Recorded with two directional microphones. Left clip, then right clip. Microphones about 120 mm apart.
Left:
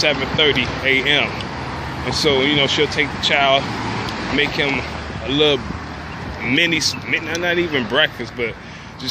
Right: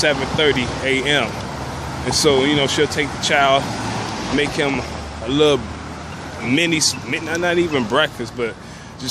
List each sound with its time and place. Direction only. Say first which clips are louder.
0.1 s speech: left 1 dB; 40° right (ahead or behind)